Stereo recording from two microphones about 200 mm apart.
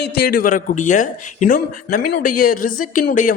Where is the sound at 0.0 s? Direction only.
50° left (ahead or behind).